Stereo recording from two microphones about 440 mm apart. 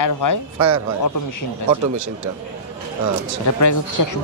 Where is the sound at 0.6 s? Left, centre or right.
Right.